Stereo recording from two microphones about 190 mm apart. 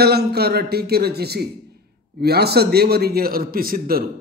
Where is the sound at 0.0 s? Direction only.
55° right (ahead or behind).